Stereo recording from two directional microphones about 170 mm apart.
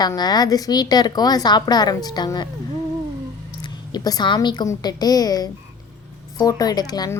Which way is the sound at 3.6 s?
25° left (ahead or behind).